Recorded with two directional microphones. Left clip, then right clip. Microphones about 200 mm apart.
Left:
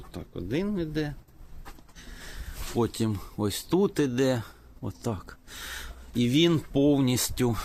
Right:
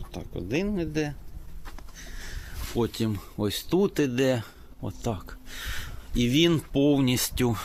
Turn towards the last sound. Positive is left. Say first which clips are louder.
# right 1 dB
turn(degrees=-10)  # may be behind; listen again after turning